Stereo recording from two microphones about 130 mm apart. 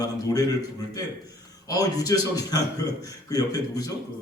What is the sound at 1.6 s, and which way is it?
A man's voice, 30° left (ahead or behind).